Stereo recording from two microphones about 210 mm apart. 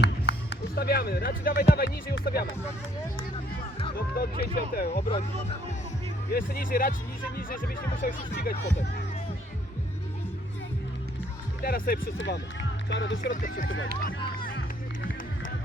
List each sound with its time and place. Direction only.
0.0 s speech: 55° left (ahead or behind)
3.9 s speech: 45° left (ahead or behind)
6.3 s speech: 45° left (ahead or behind)
8.0 s speech: 45° left (ahead or behind)
11.6 s speech: 45° left (ahead or behind)
12.1 s speech: 55° left (ahead or behind)
13.3 s speech: 40° left (ahead or behind)